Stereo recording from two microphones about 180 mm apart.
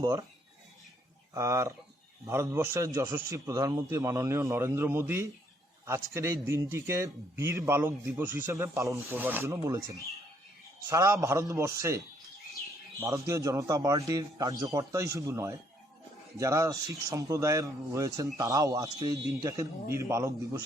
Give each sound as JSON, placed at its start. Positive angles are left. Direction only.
{"t": 0.0, "sound": "speech", "side_deg": -20}
{"t": 1.3, "sound": "speech", "side_deg": -15}
{"t": 10.8, "sound": "speech", "side_deg": -15}